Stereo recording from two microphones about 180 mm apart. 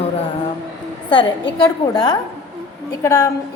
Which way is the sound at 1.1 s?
25° left (ahead or behind).